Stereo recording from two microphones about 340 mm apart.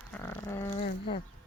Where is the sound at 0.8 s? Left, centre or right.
Centre.